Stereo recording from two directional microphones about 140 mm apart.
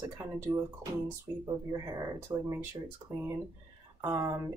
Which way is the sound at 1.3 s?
20° right (ahead or behind).